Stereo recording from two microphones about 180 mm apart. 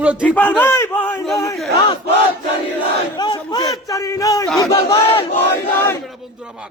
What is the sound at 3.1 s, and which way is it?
Speech, 25° left (ahead or behind).